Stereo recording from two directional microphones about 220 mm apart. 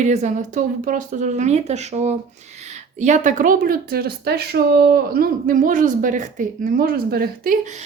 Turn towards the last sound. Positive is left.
turn(degrees=-45)  # may be behind; listen again after turning